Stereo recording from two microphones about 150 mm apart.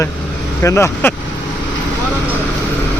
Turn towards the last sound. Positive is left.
turn(degrees=15)  # may be behind; listen again after turning